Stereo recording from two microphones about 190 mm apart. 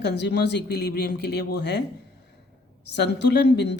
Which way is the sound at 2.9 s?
65° left (ahead or behind).